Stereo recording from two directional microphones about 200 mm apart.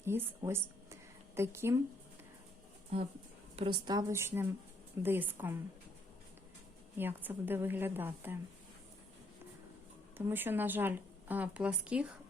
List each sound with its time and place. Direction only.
0.0 s speech: 10° right (ahead or behind)
3.5 s a woman's voice: 25° right (ahead or behind); by 5.5 s 10° right (ahead or behind)
6.9 s speech: 10° right (ahead or behind)
10.2 s speech: 10° right (ahead or behind)